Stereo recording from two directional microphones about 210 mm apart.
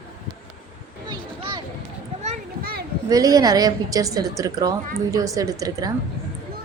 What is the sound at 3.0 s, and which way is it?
A woman's voice, 15° right (ahead or behind).